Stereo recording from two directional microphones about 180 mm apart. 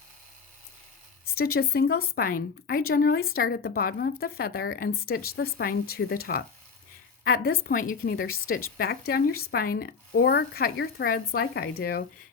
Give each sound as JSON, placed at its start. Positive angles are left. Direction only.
{"t": 1.2, "sound": "speech", "side_deg": 60}